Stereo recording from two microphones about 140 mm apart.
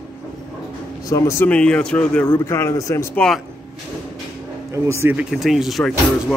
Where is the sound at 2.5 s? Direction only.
20° left (ahead or behind).